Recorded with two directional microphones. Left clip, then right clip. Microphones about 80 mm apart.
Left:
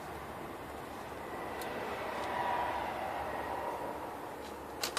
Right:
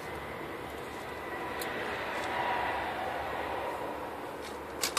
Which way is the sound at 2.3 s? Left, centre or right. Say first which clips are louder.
Right 2 dB; right.